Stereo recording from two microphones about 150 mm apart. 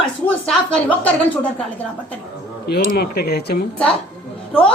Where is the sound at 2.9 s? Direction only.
90° left.